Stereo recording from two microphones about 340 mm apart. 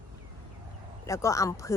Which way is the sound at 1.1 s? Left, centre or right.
Centre.